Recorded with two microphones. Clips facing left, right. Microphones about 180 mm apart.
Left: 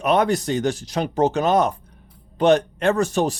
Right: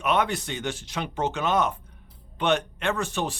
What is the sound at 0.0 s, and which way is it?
Speech, 40° left (ahead or behind).